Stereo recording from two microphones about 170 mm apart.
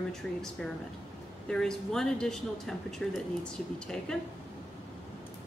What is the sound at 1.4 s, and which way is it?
Speech, 5° left (ahead or behind).